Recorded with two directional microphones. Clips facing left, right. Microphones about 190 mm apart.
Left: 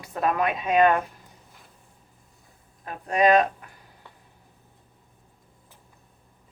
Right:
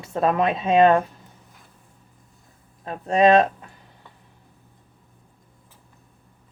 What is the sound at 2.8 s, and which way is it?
Speech, 25° right (ahead or behind).